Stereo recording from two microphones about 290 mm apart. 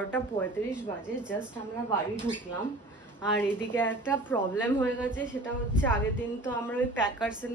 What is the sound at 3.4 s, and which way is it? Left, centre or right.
Speech, centre.